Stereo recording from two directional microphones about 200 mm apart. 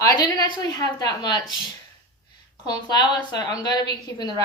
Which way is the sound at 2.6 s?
20° left (ahead or behind).